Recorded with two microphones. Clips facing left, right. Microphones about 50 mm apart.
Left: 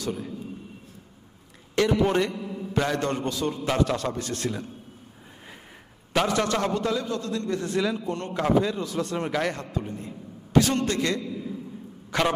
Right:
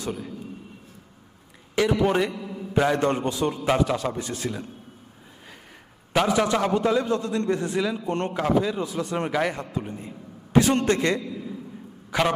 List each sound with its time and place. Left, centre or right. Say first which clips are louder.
1.8 s a man's voice: right 1 dB; centre
6.1 s a man's voice: right 2 dB; centre
7.0 s a man's voice: right 5 dB; right
7.8 s a man's voice: right 2 dB; centre
12.1 s a man's voice: right 1 dB; centre